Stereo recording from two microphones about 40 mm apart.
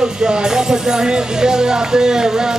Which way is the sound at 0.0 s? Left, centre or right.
Centre.